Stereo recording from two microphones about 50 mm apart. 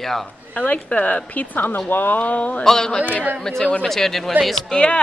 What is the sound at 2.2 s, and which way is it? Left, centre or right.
Speech, left.